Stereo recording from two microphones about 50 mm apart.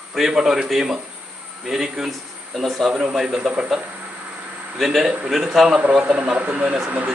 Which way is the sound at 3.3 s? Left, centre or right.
Right.